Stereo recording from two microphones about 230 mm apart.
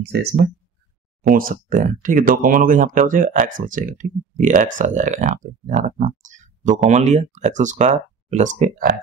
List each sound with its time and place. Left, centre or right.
1.2 s speech: right